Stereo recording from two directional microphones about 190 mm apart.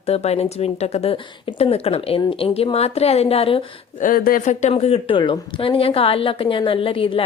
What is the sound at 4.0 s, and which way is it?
Speech, 45° left (ahead or behind).